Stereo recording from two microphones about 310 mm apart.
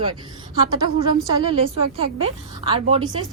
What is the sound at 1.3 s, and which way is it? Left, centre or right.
A woman's voice, centre.